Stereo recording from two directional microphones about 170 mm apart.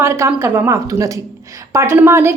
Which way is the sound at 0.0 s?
15° right (ahead or behind).